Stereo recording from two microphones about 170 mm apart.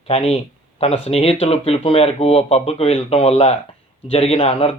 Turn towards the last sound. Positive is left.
turn(degrees=35)  # may be behind; listen again after turning